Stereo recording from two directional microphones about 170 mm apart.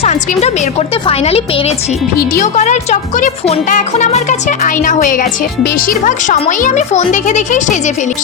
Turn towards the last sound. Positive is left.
turn(degrees=45)  # may be behind; listen again after turning